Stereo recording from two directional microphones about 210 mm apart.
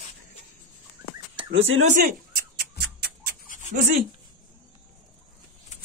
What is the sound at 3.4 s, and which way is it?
Dog, 40° left (ahead or behind).